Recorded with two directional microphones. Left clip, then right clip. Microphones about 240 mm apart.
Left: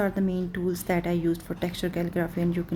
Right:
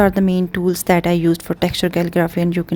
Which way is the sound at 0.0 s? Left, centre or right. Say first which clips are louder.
Right 12 dB; right.